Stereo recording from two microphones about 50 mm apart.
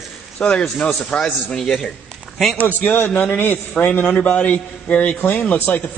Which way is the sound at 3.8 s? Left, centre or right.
Left.